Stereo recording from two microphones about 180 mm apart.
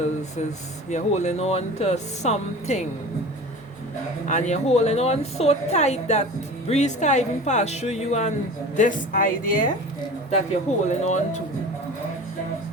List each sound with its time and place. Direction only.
0.9 s a woman's voice: 40° left (ahead or behind)
4.3 s a woman's voice: 40° left (ahead or behind)